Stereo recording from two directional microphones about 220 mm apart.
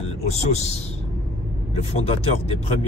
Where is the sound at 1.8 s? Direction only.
25° left (ahead or behind).